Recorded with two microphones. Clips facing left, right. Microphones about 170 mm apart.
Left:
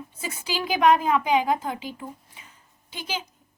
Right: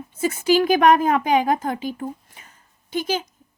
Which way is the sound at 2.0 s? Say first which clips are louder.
Right 8 dB; 45° right (ahead or behind).